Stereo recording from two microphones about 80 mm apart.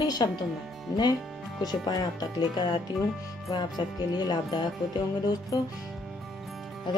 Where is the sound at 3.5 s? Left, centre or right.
Left.